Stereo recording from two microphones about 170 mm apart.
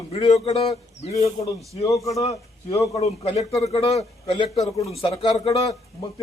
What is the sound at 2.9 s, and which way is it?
A man's voice, 35° left (ahead or behind).